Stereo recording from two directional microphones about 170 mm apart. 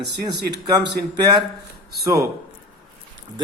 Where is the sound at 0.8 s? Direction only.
90° right.